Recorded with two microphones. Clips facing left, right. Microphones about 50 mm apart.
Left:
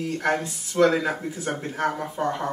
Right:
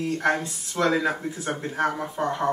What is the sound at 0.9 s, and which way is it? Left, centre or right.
Speech, centre.